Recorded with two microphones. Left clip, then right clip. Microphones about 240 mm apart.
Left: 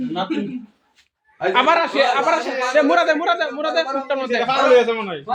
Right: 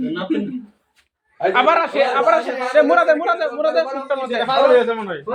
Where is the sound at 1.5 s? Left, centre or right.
Centre.